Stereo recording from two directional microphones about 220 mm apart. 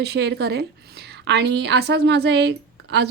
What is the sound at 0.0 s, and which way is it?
A woman's voice, 50° right (ahead or behind).